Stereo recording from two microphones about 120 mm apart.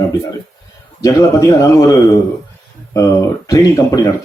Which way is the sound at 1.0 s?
25° left (ahead or behind).